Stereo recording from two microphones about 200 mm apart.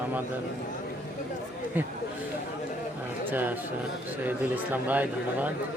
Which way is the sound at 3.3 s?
10° right (ahead or behind).